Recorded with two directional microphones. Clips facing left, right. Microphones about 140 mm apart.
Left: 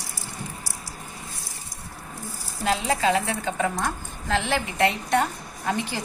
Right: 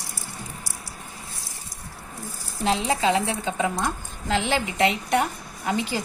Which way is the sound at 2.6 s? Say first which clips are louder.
Right 1 dB; 25° right (ahead or behind).